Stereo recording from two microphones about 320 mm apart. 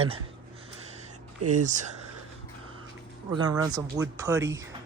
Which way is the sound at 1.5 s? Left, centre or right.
Right.